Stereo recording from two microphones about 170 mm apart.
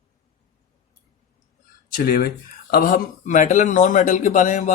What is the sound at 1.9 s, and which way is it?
Speech, 60° left (ahead or behind).